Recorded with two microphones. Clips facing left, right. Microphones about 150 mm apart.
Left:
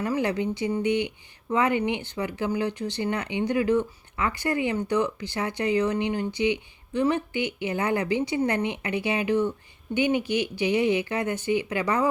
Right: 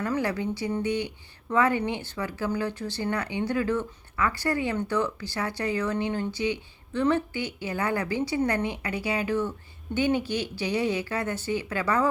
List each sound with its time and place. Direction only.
0.0 s a woman's voice: 20° left (ahead or behind)